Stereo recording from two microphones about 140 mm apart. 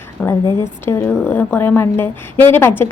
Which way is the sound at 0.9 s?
15° left (ahead or behind).